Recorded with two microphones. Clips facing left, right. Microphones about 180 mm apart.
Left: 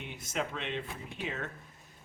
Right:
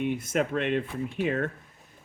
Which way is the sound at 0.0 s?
55° right (ahead or behind).